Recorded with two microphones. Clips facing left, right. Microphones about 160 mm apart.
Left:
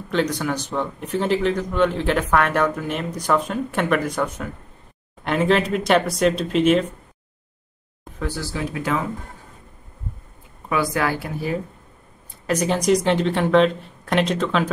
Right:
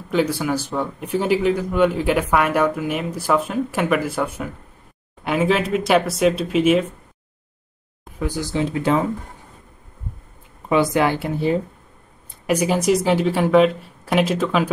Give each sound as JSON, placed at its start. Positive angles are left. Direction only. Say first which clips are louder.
{"t": 0.1, "sound": "speech", "louder": "right 2 dB", "side_deg": -5}
{"t": 8.2, "sound": "a woman's voice", "louder": "right 4 dB", "side_deg": -15}
{"t": 10.7, "sound": "a woman's voice", "louder": "right 4 dB", "side_deg": -20}
{"t": 12.4, "sound": "speech", "louder": "right 1 dB", "side_deg": -10}